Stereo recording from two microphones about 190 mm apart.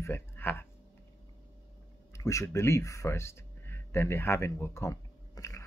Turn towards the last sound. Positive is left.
turn(degrees=15)  # may be behind; listen again after turning